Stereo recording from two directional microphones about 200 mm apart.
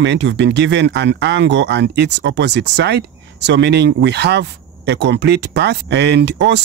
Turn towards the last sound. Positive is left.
turn(degrees=-60)  # may be behind; listen again after turning